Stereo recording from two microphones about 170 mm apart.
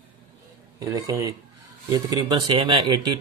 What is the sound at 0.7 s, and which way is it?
Speech, 20° right (ahead or behind).